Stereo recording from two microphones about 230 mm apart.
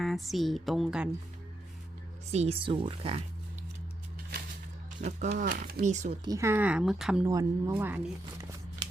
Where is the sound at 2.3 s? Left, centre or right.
Right.